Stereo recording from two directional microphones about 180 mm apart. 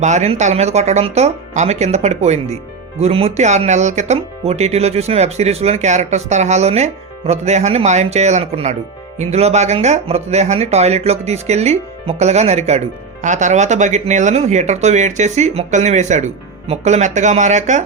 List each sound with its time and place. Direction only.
0.0 s speech: 40° right (ahead or behind)